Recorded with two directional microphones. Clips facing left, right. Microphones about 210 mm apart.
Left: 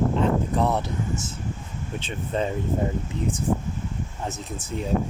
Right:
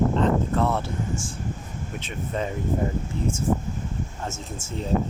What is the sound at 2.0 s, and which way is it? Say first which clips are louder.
Speech: left 2 dB; 30° left (ahead or behind).